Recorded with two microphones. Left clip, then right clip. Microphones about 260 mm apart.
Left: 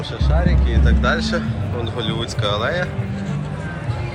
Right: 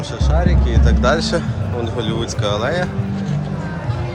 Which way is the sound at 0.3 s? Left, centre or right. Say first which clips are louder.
Right 3 dB; centre.